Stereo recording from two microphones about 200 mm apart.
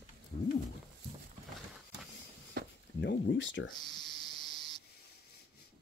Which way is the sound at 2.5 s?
50° right (ahead or behind).